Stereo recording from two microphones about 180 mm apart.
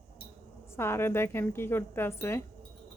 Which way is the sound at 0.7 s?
15° left (ahead or behind).